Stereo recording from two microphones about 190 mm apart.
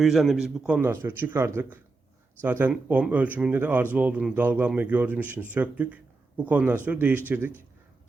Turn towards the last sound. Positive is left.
turn(degrees=-10)  # may be behind; listen again after turning